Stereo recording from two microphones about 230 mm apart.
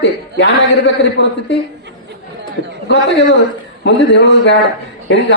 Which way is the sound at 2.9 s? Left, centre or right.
Left.